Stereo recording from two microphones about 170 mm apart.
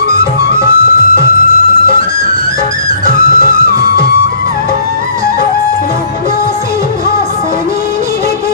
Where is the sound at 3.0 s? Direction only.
60° left (ahead or behind).